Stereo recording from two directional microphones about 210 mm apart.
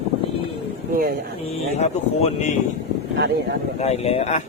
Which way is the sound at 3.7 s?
30° left (ahead or behind).